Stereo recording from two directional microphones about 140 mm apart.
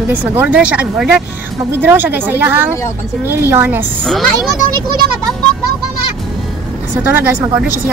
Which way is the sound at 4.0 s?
5° left (ahead or behind).